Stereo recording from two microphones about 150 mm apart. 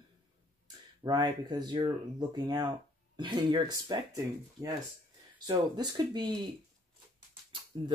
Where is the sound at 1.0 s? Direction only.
30° right (ahead or behind).